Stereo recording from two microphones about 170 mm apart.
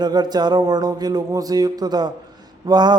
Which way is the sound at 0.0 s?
25° right (ahead or behind).